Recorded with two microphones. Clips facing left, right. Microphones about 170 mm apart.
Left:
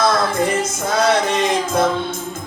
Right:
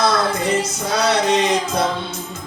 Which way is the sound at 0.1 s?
50° left (ahead or behind).